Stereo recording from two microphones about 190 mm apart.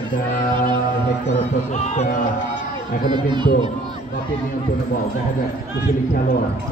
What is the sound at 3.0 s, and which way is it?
Speech, 25° right (ahead or behind).